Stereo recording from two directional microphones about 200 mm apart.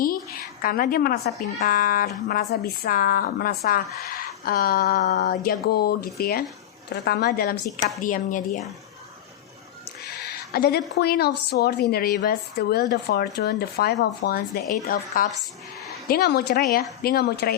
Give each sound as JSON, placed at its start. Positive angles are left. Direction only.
{"t": 0.0, "sound": "speech", "side_deg": 45}
{"t": 10.2, "sound": "a sound", "side_deg": 50}
{"t": 10.9, "sound": "speech", "side_deg": 55}